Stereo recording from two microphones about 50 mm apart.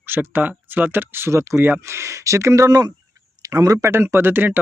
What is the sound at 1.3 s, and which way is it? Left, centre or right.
Speech, right.